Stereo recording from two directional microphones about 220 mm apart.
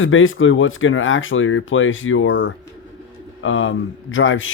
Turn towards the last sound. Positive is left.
turn(degrees=60)  # may be behind; listen again after turning